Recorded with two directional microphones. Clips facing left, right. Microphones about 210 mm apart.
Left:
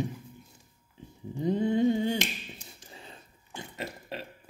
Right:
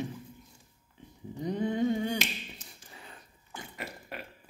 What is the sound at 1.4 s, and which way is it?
Finger snapping, 25° left (ahead or behind).